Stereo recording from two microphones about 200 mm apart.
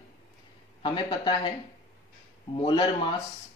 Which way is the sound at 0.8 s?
25° left (ahead or behind).